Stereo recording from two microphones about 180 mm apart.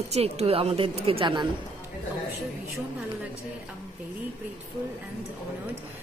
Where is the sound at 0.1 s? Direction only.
35° right (ahead or behind).